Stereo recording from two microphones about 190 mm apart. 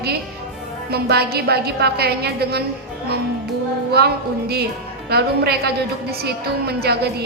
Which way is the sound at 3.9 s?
55° right (ahead or behind).